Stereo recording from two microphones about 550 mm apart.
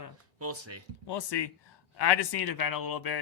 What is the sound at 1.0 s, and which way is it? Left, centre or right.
Speech, left.